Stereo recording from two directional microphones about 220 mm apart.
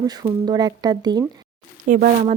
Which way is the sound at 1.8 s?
35° right (ahead or behind).